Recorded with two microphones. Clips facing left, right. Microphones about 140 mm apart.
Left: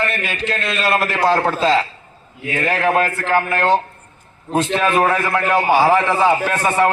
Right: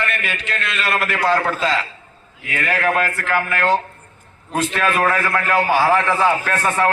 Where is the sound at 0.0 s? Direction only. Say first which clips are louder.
Left 3 dB; 30° left (ahead or behind).